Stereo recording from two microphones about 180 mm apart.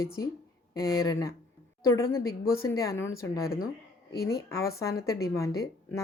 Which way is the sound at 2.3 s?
55° left (ahead or behind).